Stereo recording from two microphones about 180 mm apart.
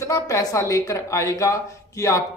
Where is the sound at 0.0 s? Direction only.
20° left (ahead or behind).